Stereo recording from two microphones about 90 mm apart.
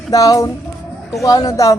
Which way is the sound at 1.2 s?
45° left (ahead or behind).